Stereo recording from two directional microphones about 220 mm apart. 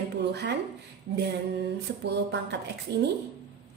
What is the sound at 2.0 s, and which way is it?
Speech, 50° right (ahead or behind).